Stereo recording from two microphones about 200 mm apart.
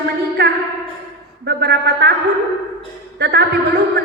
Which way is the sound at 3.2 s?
55° right (ahead or behind).